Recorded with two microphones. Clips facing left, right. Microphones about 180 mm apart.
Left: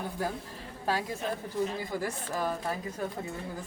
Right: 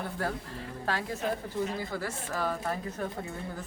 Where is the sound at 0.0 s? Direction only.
10° left (ahead or behind).